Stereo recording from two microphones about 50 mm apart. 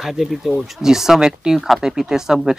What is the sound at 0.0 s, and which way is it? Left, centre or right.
Speech, centre.